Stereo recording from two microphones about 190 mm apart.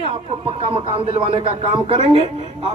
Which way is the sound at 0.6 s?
25° right (ahead or behind).